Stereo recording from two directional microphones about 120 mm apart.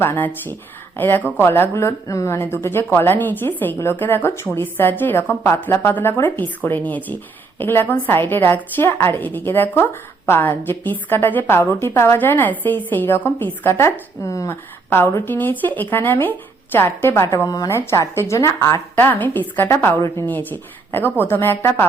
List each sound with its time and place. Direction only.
0.0 s a woman's voice: 20° left (ahead or behind)